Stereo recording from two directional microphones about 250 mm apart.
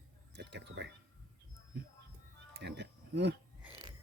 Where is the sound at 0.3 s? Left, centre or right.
Right.